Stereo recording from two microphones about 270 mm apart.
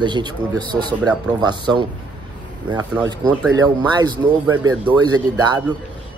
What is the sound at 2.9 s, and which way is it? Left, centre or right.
Speech, centre.